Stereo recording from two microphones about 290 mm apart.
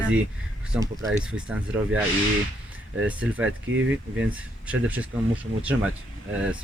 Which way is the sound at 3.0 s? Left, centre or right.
Centre.